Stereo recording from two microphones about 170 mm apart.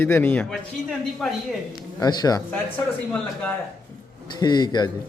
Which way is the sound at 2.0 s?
25° left (ahead or behind).